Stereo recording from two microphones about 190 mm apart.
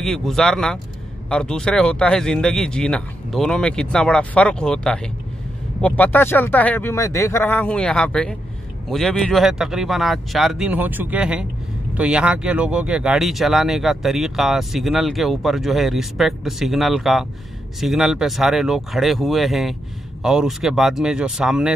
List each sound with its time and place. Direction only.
0.0 s speech: centre (ahead or behind)